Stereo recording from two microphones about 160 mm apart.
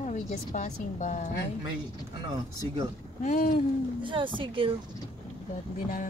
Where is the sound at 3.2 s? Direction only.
55° left (ahead or behind).